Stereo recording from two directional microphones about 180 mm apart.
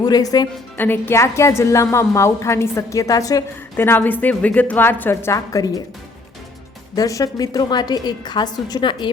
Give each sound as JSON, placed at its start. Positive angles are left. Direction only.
{"t": 0.0, "sound": "a woman's voice", "side_deg": 20}
{"t": 6.9, "sound": "a woman's voice", "side_deg": 20}